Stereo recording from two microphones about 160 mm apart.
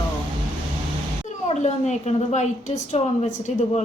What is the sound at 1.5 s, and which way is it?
A woman's voice, 45° left (ahead or behind).